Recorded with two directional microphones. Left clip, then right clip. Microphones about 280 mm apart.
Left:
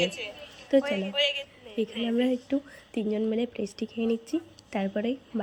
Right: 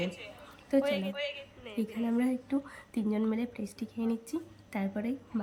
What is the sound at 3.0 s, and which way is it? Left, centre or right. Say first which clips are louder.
A woman's voice: left 5 dB; centre.